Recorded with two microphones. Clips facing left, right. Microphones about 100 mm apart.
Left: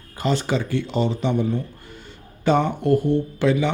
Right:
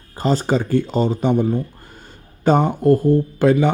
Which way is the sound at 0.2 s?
40° right (ahead or behind).